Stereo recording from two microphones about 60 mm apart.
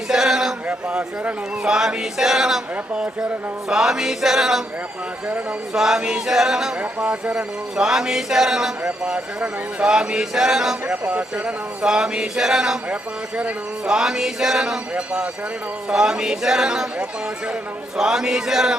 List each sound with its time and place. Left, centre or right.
0.1 s a sound: centre
0.7 s speech: centre
5.7 s speech: centre
7.0 s speech: right
7.8 s speech: centre
8.8 s speech: centre
10.8 s speech: centre
12.9 s speech: right
13.8 s speech: centre
14.9 s speech: centre
17.9 s speech: centre